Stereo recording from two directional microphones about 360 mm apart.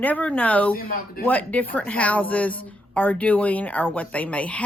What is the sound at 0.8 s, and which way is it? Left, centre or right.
Speech, left.